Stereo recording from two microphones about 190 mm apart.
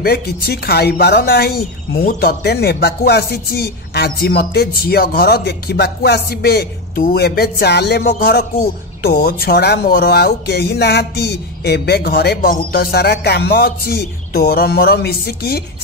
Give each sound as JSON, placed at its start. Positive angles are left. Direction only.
{"t": 0.0, "sound": "speech", "side_deg": 55}